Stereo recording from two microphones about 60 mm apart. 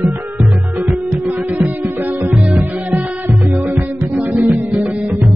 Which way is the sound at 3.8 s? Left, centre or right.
Right.